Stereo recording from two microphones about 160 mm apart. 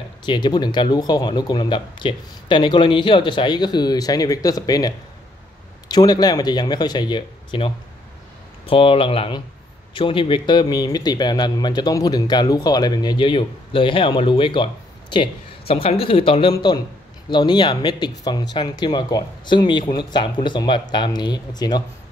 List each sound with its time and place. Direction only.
0.2 s speech: 30° left (ahead or behind)